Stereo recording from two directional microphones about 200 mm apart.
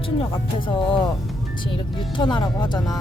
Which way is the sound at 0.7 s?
25° left (ahead or behind).